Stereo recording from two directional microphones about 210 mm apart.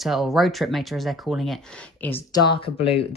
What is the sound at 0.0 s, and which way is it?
Speech, centre (ahead or behind).